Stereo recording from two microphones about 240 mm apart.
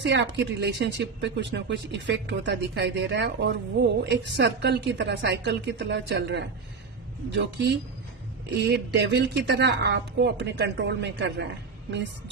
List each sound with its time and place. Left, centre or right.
0.0 s speech: right